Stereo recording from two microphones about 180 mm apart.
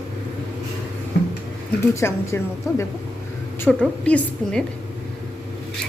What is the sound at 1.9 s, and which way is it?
Speech, 15° left (ahead or behind).